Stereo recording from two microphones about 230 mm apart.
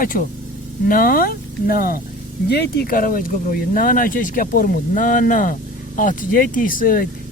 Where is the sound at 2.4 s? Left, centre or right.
Left.